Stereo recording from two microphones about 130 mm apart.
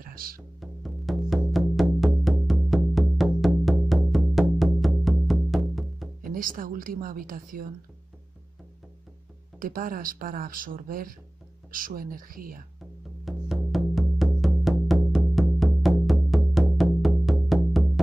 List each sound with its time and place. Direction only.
0.0 s music: 90° right
0.6 s music: centre (ahead or behind)
6.2 s a woman's voice: 90° right
9.6 s speech: 90° right
13.2 s music: centre (ahead or behind)